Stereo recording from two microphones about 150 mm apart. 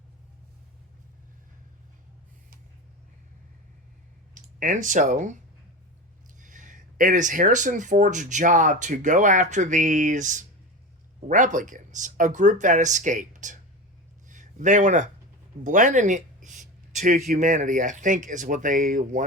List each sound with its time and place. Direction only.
4.4 s speech: 60° right (ahead or behind)
6.4 s speech: 60° right (ahead or behind)
14.3 s a sound: 55° right (ahead or behind)
15.6 s speech: 60° right (ahead or behind)